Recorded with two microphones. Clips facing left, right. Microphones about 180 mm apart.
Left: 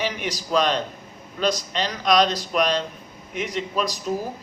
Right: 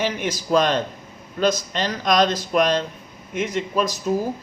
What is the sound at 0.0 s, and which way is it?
Speech, 45° right (ahead or behind).